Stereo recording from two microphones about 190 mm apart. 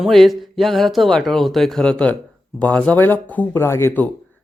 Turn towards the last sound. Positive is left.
turn(degrees=10)  # may be behind; listen again after turning